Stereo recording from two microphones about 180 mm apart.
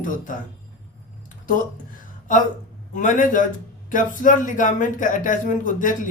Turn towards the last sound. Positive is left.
turn(degrees=45)  # may be behind; listen again after turning